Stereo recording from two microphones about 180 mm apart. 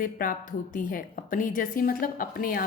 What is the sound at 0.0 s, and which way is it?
A woman's voice, 50° left (ahead or behind).